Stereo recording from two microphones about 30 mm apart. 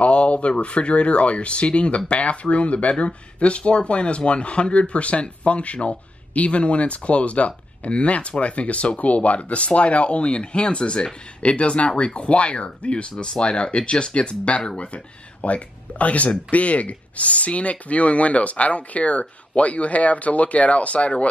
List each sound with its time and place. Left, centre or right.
0.0 s speech: left
15.4 s speech: left